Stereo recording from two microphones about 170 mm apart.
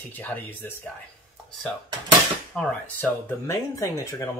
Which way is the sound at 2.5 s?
10° left (ahead or behind).